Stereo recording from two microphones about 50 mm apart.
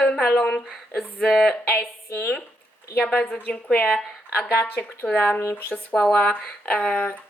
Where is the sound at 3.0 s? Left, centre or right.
Left.